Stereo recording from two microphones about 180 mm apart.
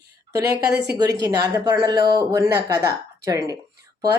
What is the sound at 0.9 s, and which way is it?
Speech, 20° right (ahead or behind).